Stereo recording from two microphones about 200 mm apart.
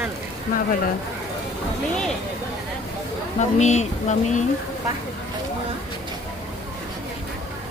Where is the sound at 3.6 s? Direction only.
35° left (ahead or behind).